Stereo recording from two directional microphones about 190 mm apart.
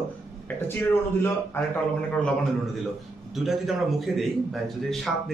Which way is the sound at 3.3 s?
Centre (ahead or behind).